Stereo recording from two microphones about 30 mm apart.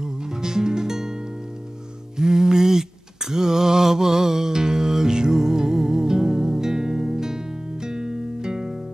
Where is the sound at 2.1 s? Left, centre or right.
Centre.